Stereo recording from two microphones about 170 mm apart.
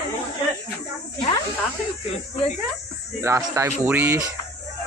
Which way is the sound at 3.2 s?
15° right (ahead or behind).